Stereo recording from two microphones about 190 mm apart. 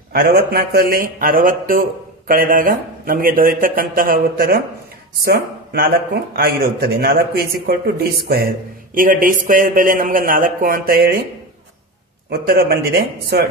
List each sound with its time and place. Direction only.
0.1 s speech: 55° right (ahead or behind)
12.3 s speech: 55° right (ahead or behind)